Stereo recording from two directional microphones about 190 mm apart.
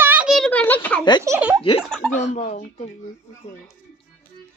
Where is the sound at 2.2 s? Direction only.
40° left (ahead or behind).